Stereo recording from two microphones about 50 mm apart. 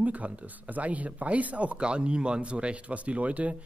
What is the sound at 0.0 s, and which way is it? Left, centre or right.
Speech, right.